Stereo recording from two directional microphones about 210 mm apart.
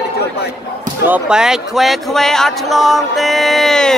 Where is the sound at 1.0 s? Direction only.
5° right (ahead or behind).